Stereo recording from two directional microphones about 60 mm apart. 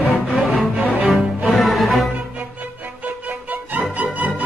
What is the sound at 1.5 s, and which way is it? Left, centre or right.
Music, centre.